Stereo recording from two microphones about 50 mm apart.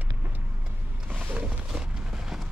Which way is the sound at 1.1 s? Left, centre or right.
Right.